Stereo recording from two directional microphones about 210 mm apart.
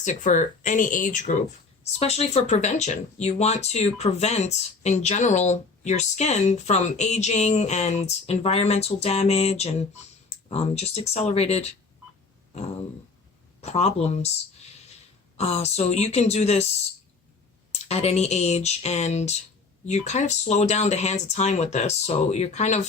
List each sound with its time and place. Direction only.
0.0 s speech: 35° left (ahead or behind)
12.5 s a sound: 30° left (ahead or behind)
13.6 s speech: 30° left (ahead or behind)
15.4 s speech: 30° left (ahead or behind)